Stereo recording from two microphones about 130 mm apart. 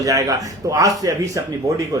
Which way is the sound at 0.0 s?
25° right (ahead or behind).